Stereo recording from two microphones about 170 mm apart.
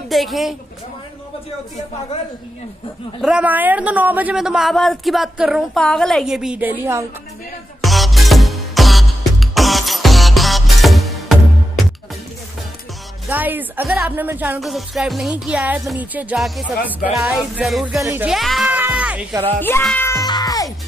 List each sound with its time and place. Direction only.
0.1 s a man's voice: centre (ahead or behind)
3.2 s a man's voice: 5° right (ahead or behind)
7.8 s music: centre (ahead or behind)
13.3 s a woman's voice: 10° right (ahead or behind)
14.6 s a man's voice: centre (ahead or behind)
18.7 s music: 10° right (ahead or behind)
19.8 s music: 10° left (ahead or behind)
20.2 s music: 25° left (ahead or behind)